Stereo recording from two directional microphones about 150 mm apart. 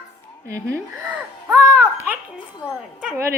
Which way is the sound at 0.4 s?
20° right (ahead or behind).